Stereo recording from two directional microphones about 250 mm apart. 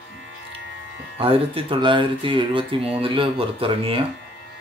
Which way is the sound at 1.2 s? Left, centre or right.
Right.